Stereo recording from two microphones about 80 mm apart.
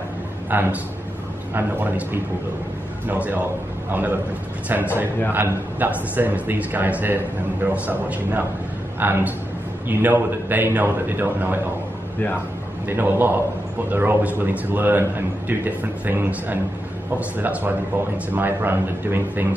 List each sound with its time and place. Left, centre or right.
0.5 s a man's voice: right
3.1 s a man's voice: right
5.3 s a man's voice: right
12.8 s a man's voice: right